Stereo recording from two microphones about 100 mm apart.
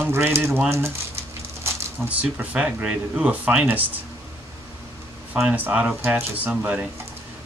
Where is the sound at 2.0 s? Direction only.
15° right (ahead or behind).